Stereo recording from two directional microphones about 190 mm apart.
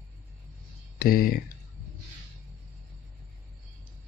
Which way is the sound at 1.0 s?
50° left (ahead or behind).